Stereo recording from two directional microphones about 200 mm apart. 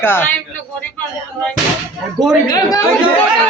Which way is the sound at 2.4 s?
20° left (ahead or behind).